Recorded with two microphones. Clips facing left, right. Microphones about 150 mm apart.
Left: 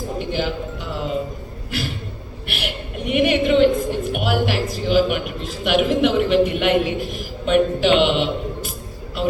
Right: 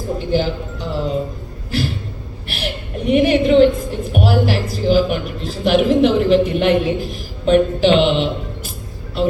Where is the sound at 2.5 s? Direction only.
35° right (ahead or behind).